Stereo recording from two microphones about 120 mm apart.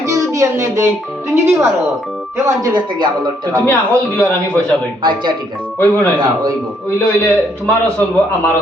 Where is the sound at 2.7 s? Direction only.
35° right (ahead or behind).